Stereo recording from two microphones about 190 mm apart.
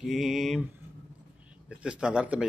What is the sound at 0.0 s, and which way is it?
A man's voice, centre (ahead or behind).